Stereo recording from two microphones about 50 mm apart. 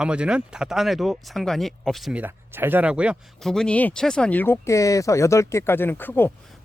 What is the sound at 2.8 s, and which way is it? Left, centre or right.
Speech, right.